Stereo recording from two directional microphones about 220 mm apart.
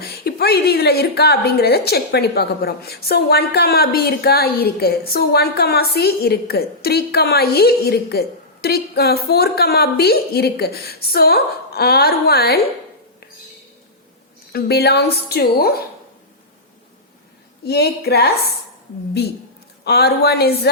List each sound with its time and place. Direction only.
0.0 s a woman's voice: 45° left (ahead or behind)
14.5 s a woman's voice: 45° left (ahead or behind)
17.7 s a woman's voice: 45° left (ahead or behind)
19.8 s a woman's voice: 45° left (ahead or behind)